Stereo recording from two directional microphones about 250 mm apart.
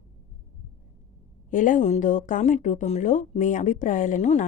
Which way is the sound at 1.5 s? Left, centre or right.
Left.